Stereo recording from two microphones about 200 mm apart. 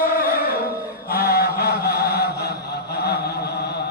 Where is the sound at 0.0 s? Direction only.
50° left (ahead or behind).